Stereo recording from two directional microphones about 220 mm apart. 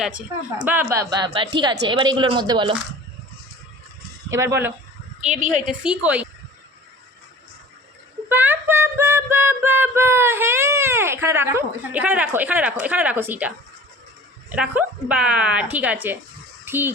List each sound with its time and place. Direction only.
0.0 s speech: 5° right (ahead or behind)
4.3 s speech: 15° right (ahead or behind)
8.3 s female singing: 10° right (ahead or behind)
14.5 s speech: 5° right (ahead or behind)